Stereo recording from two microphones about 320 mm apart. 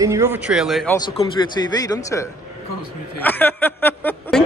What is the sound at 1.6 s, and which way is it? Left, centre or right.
Speech, centre.